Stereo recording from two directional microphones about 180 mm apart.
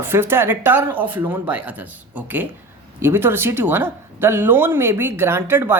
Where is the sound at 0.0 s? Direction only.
10° right (ahead or behind).